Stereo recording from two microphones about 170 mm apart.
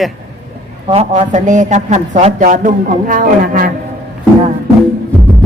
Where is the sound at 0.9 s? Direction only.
40° right (ahead or behind); by 3.7 s 60° right (ahead or behind).